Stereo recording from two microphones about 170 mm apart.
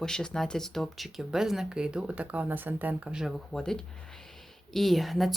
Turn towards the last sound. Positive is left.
turn(degrees=0)  # may be behind; listen again after turning